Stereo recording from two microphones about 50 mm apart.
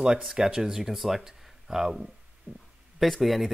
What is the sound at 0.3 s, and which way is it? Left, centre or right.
Speech, centre.